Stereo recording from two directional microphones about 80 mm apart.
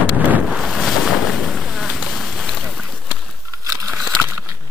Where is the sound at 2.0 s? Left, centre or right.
Centre.